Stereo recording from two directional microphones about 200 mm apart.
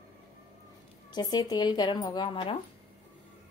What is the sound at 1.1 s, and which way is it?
Speech, 20° left (ahead or behind).